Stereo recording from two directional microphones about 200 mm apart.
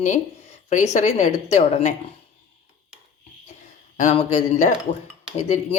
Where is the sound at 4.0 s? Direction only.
35° left (ahead or behind).